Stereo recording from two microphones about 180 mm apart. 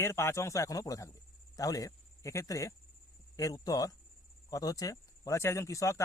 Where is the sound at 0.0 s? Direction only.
15° left (ahead or behind).